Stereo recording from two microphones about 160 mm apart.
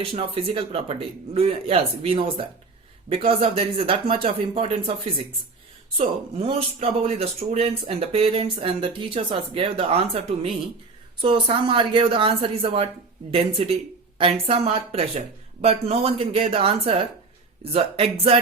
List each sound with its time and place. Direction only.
0.0 s speech: 35° right (ahead or behind)
6.0 s speech: 35° right (ahead or behind)